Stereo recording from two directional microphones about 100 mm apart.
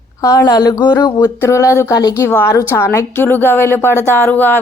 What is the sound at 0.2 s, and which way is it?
Speech, 35° left (ahead or behind).